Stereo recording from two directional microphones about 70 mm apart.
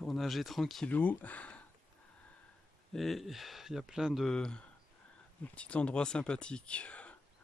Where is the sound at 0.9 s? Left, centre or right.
Left.